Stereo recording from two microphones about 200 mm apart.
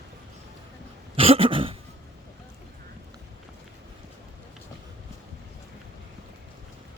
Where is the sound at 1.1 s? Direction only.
30° right (ahead or behind).